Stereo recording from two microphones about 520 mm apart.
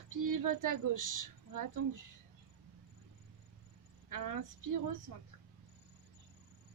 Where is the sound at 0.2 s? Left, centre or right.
Right.